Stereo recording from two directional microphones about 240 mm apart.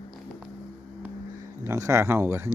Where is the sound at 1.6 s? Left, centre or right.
Centre.